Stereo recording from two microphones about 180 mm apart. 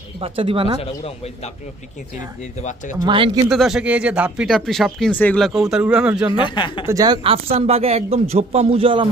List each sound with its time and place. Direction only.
0.2 s speech: 30° right (ahead or behind)
0.8 s speech: 35° left (ahead or behind)
3.1 s speech: 25° right (ahead or behind)
3.5 s speech: centre (ahead or behind)
6.4 s speech: 25° left (ahead or behind)
6.8 s a man's voice: 20° right (ahead or behind)